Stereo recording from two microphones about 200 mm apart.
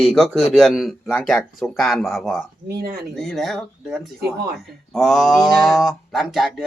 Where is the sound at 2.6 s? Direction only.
50° right (ahead or behind).